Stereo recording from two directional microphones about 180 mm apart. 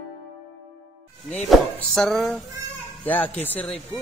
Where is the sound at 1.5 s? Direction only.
Centre (ahead or behind).